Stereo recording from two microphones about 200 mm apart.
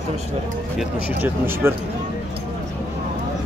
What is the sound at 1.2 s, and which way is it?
Speech, 10° right (ahead or behind).